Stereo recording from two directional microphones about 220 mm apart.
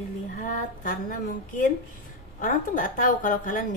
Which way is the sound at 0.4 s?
35° left (ahead or behind).